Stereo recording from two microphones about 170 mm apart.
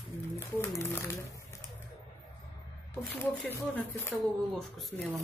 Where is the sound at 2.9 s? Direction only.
10° left (ahead or behind).